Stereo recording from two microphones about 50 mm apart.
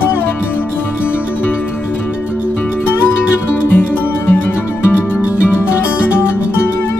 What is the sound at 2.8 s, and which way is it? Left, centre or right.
Music, left.